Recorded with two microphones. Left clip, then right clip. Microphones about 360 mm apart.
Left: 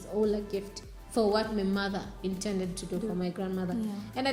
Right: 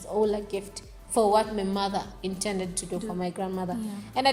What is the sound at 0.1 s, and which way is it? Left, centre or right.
Speech, right.